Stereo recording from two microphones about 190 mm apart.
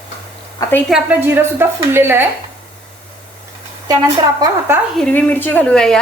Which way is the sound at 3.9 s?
20° right (ahead or behind).